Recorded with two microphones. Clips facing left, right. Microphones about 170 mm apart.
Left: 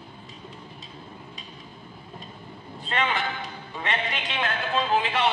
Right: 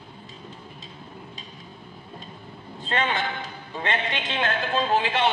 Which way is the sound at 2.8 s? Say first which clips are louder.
Right 1 dB; 30° right (ahead or behind).